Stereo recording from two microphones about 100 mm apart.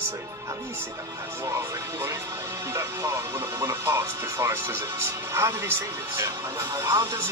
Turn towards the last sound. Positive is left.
turn(degrees=-30)  # may be behind; listen again after turning